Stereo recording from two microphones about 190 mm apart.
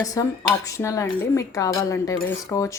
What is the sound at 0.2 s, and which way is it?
Speech, 20° left (ahead or behind).